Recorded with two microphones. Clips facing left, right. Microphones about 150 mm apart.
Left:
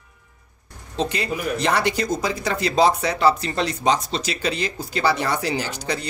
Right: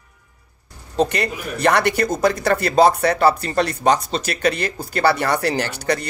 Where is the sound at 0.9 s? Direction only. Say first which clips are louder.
Right 4 dB; 60° right (ahead or behind).